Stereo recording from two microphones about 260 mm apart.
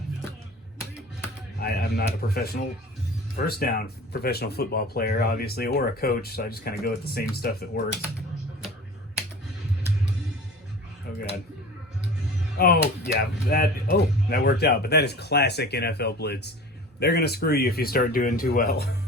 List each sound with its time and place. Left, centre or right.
1.6 s speech: left
12.5 s speech: left